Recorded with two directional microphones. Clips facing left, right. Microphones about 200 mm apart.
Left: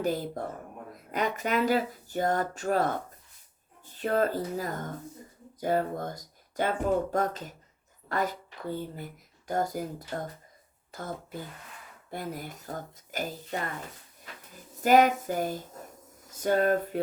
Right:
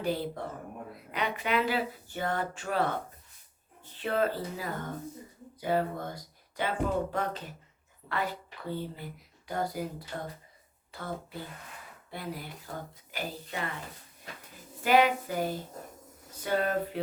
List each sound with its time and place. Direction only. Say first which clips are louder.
0.0 s speech: left 2 dB; 45° left (ahead or behind)
3.9 s speech: left 2 dB; 45° left (ahead or behind)
14.8 s speech: left 3 dB; 45° left (ahead or behind)